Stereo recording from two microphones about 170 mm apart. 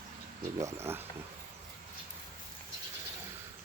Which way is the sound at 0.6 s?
15° right (ahead or behind).